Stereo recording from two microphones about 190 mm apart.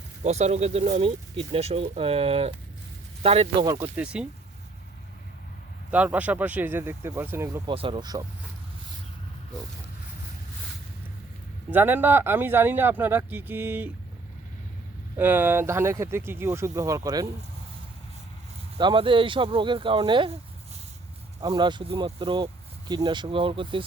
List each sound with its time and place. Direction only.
0.3 s speech: 35° right (ahead or behind)
3.9 s speech: 5° right (ahead or behind)
5.9 s speech: 10° right (ahead or behind)
7.7 s speech: 30° right (ahead or behind)
11.7 s speech: 10° right (ahead or behind)
15.2 s speech: 10° right (ahead or behind)
18.8 s speech: 25° right (ahead or behind)
21.4 s speech: 20° right (ahead or behind)